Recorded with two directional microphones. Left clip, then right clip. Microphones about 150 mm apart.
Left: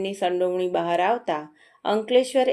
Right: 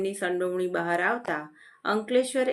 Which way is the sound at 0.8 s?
35° right (ahead or behind).